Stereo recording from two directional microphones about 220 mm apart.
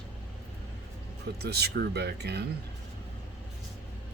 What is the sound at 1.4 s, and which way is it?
Speech, 45° right (ahead or behind).